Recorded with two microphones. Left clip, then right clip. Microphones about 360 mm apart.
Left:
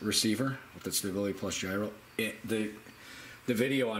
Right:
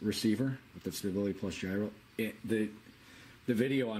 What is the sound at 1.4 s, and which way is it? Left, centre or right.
Speech, left.